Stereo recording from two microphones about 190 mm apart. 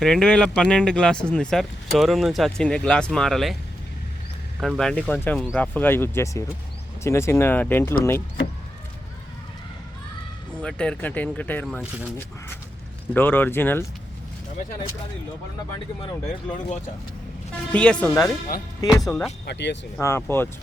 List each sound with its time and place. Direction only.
0.0 s speech: 5° left (ahead or behind)
4.6 s speech: centre (ahead or behind)
10.6 s speech: 5° left (ahead or behind)
13.1 s speech: 10° left (ahead or behind)
16.2 s speech: 40° left (ahead or behind)
17.5 s speech: 5° left (ahead or behind)
18.8 s speech: 20° left (ahead or behind)
19.0 s speech: centre (ahead or behind)
19.5 s speech: 65° left (ahead or behind)
20.0 s speech: 15° left (ahead or behind)